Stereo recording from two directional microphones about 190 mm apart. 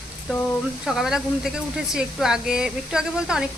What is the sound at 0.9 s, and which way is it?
A woman's voice, centre (ahead or behind).